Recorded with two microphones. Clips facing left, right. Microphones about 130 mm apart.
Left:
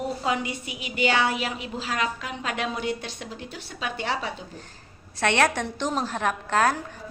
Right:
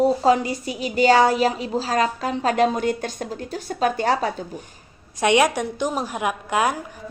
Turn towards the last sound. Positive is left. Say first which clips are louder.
# right 1 dB
turn(degrees=-15)  # may be behind; listen again after turning